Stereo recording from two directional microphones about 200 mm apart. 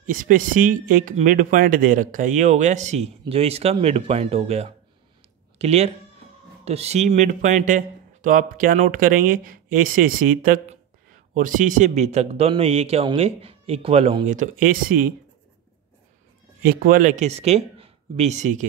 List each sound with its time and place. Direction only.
0.0 s speech: 40° right (ahead or behind)
16.6 s speech: 45° right (ahead or behind)